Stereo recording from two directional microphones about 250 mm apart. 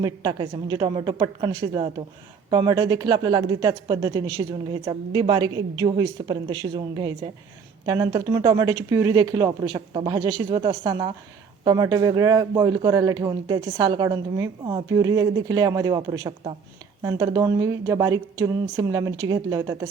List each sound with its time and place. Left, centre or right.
0.0 s speech: centre